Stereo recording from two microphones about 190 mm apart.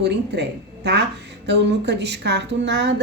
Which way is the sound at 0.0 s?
65° right (ahead or behind).